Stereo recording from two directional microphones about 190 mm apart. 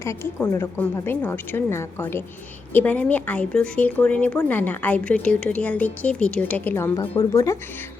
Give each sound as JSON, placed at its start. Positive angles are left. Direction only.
{"t": 0.0, "sound": "speech", "side_deg": 15}